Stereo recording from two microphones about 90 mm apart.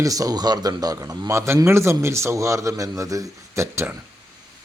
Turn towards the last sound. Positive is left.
turn(degrees=-30)  # may be behind; listen again after turning